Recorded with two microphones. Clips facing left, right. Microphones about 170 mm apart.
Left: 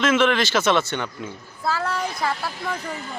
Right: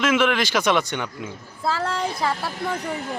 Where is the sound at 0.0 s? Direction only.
10° right (ahead or behind).